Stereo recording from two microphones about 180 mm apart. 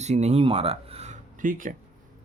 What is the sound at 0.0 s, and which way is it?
Speech, 40° right (ahead or behind).